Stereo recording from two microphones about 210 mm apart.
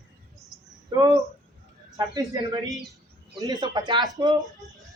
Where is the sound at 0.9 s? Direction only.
20° right (ahead or behind).